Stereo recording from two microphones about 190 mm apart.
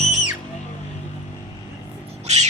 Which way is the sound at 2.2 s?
35° right (ahead or behind).